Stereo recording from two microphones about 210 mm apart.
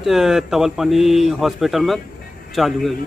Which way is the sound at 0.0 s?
Centre (ahead or behind).